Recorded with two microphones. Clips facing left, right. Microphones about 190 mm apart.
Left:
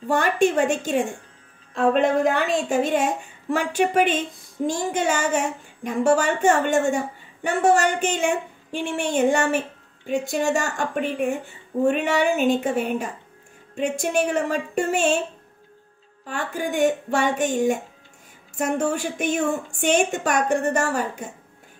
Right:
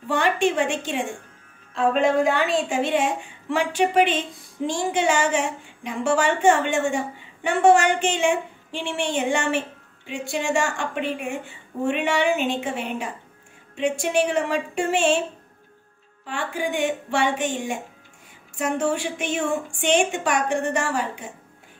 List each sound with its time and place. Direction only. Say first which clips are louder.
0.1 s a woman's voice: left 2 dB; 40° left (ahead or behind)
16.3 s a woman's voice: even; 40° left (ahead or behind)